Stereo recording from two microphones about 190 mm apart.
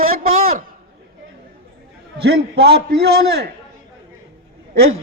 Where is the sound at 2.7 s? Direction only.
55° right (ahead or behind).